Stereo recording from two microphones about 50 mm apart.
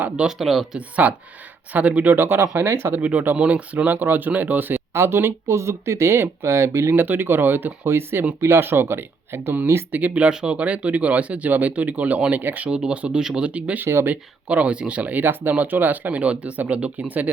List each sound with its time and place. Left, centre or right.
0.3 s speech: centre
0.8 s speech: right
2.0 s speech: right
2.6 s speech: right
2.9 s speech: right
4.9 s speech: right
5.5 s speech: right
6.4 s speech: right
6.9 s speech: right
7.9 s speech: right
9.9 s speech: right
12.7 s speech: centre
15.2 s speech: right